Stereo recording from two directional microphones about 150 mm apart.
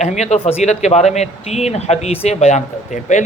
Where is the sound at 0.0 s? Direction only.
50° left (ahead or behind).